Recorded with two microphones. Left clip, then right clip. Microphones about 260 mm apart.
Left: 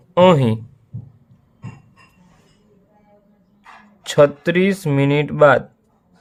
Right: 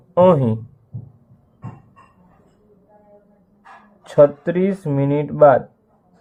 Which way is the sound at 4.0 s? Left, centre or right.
Left.